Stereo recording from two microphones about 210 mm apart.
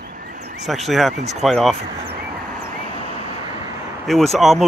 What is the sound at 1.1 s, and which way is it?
Speech, 30° right (ahead or behind).